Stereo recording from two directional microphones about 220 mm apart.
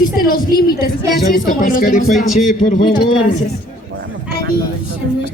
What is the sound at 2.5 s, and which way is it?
Speech, 35° left (ahead or behind).